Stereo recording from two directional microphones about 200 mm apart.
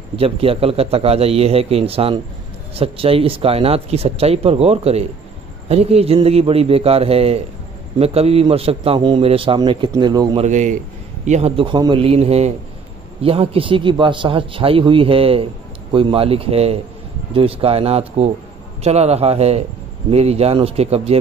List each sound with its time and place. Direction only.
0.1 s a man's voice: 30° right (ahead or behind)
10.4 s a man's voice: 35° right (ahead or behind)